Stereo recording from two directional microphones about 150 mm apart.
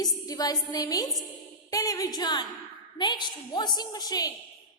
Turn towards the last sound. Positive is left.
turn(degrees=25)  # may be behind; listen again after turning